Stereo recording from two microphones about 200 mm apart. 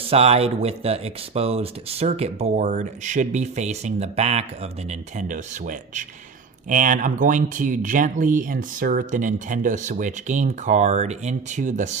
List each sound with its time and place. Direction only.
0.0 s speech: 30° right (ahead or behind)